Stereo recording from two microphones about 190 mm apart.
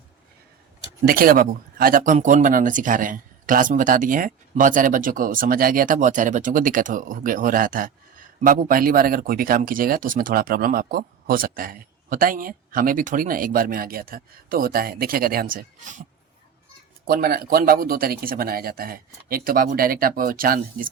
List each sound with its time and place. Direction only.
1.0 s speech: 50° right (ahead or behind)
17.1 s speech: 55° right (ahead or behind)